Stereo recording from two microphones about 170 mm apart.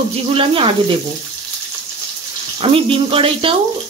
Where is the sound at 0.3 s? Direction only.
35° right (ahead or behind).